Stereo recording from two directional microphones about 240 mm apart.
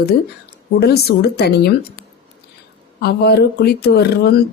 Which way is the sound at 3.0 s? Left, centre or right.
Left.